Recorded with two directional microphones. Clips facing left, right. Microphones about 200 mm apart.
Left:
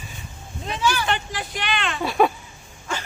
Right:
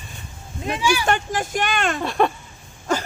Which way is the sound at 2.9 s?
40° right (ahead or behind).